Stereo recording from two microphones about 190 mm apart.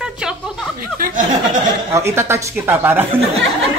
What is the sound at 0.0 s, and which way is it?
Chuckle, 5° right (ahead or behind).